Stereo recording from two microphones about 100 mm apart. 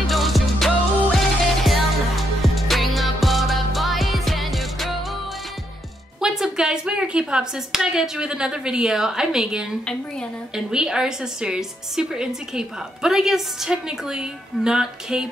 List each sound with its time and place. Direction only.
0.0 s music: centre (ahead or behind)
6.2 s a woman's voice: 5° right (ahead or behind)